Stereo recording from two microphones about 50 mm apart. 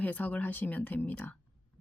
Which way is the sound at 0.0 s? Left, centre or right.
Left.